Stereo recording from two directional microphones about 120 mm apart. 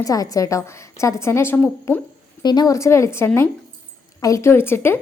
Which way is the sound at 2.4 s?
35° left (ahead or behind).